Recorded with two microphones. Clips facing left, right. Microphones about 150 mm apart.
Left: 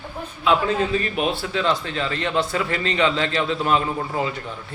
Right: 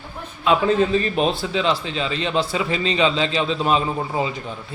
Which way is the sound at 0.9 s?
30° right (ahead or behind).